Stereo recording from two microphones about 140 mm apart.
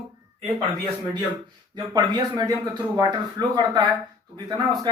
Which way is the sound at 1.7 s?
25° right (ahead or behind).